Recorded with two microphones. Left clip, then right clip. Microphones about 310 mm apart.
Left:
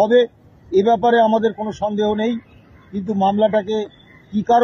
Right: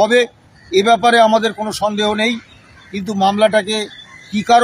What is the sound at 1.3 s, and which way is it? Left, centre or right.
Speech, centre.